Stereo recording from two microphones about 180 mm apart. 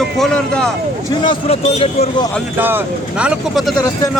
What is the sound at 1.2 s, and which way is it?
Speech, 35° left (ahead or behind).